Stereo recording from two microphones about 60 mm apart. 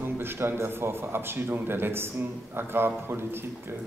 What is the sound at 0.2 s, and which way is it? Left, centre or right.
A man's voice, right.